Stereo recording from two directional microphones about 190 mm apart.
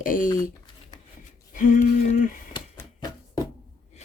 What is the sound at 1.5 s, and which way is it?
Speech, 45° left (ahead or behind).